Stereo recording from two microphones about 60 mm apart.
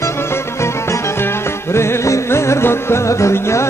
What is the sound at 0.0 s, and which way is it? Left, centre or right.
Music, left.